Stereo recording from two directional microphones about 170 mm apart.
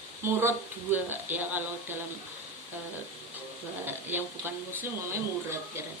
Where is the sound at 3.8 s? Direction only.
10° right (ahead or behind).